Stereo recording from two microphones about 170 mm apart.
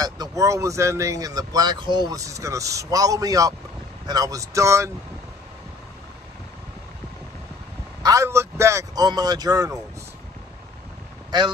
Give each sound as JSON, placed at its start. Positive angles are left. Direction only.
{"t": 0.0, "sound": "speech", "side_deg": -20}
{"t": 8.0, "sound": "speech", "side_deg": -20}